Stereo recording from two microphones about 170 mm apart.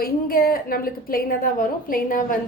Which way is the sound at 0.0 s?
60° left (ahead or behind).